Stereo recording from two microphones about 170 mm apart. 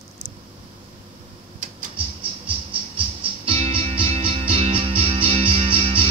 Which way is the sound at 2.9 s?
35° right (ahead or behind).